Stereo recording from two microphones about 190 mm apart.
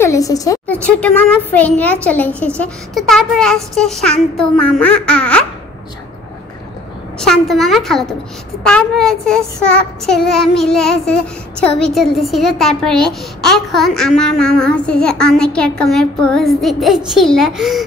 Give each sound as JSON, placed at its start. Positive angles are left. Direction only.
{"t": 0.0, "sound": "a woman's voice", "side_deg": 15}
{"t": 0.8, "sound": "a woman's voice", "side_deg": 10}
{"t": 7.2, "sound": "a woman's voice", "side_deg": 0}